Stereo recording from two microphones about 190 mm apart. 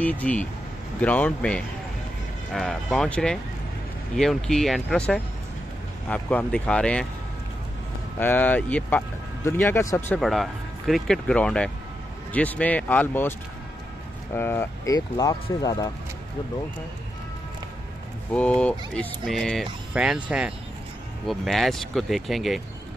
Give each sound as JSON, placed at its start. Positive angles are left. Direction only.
{"t": 0.0, "sound": "speech", "side_deg": 5}
{"t": 8.2, "sound": "speech", "side_deg": 10}
{"t": 10.2, "sound": "speech", "side_deg": 0}
{"t": 14.3, "sound": "speech", "side_deg": 10}
{"t": 18.3, "sound": "speech", "side_deg": 5}